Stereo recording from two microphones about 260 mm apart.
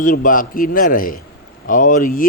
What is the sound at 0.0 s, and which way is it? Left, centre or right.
A man's voice, left.